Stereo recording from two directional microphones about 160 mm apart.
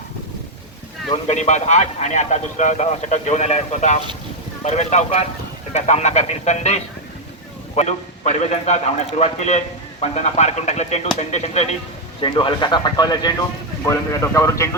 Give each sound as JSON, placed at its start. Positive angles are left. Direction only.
{"t": 1.1, "sound": "a man's voice", "side_deg": 45}
{"t": 12.2, "sound": "a man's voice", "side_deg": 30}